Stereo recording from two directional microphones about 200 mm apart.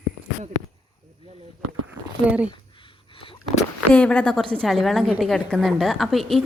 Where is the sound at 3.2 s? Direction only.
25° left (ahead or behind).